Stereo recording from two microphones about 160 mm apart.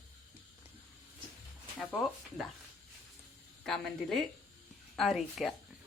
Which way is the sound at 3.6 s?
Centre (ahead or behind).